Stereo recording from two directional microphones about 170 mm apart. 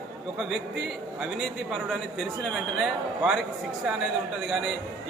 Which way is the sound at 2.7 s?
Centre (ahead or behind).